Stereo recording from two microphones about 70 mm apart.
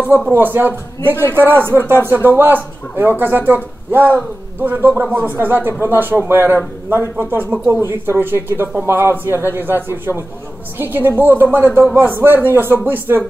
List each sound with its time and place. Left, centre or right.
0.3 s speech: right